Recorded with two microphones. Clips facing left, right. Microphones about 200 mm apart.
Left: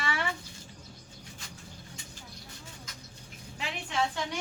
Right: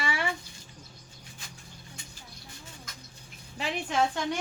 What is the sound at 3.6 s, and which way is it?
Speech, 45° right (ahead or behind).